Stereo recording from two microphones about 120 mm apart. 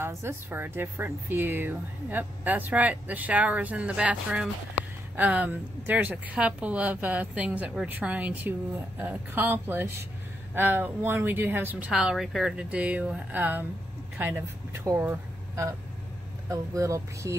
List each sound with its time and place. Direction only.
0.0 s speech: 20° right (ahead or behind)